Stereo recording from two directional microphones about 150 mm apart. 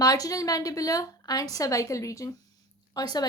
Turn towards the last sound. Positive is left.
turn(degrees=25)  # may be behind; listen again after turning